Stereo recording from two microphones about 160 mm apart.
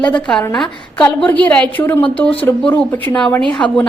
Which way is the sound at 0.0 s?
5° left (ahead or behind).